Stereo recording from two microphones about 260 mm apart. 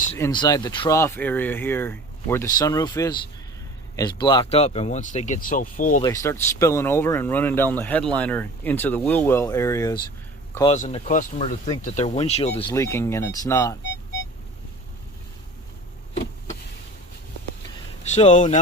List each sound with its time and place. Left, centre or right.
0.2 s speech: centre; by 6.0 s left
6.0 s speech: centre
10.7 s speech: left
12.7 s speech: centre
18.0 s speech: left